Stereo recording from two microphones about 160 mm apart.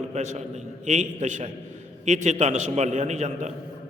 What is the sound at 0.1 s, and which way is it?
A man's voice, 45° right (ahead or behind).